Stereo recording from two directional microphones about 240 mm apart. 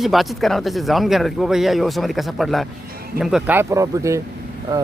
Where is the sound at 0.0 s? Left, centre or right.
Centre.